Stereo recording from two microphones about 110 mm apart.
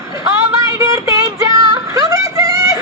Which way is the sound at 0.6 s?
30° right (ahead or behind).